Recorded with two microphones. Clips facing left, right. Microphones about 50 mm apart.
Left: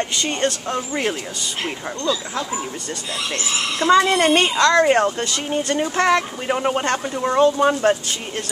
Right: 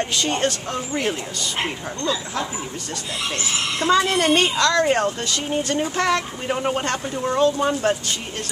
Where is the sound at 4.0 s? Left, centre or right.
Left; by 5.9 s centre.